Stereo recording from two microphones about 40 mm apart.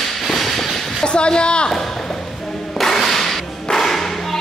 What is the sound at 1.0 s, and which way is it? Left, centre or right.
Speech, left.